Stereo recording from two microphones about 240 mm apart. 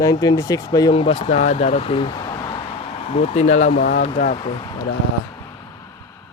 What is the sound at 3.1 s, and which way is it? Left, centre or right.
Speech, left.